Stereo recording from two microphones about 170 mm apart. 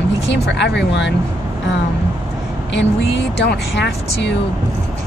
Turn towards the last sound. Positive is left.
turn(degrees=90)